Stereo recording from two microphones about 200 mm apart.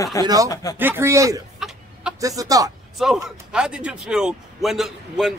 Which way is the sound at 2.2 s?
15° right (ahead or behind).